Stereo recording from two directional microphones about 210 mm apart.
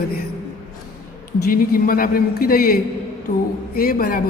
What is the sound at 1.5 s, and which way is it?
A man's voice, 45° left (ahead or behind).